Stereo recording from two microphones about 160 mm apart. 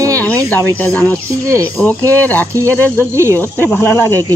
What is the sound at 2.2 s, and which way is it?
Speech, 10° left (ahead or behind).